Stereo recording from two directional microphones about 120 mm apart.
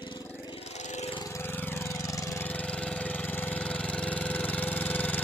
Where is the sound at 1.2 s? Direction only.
20° left (ahead or behind).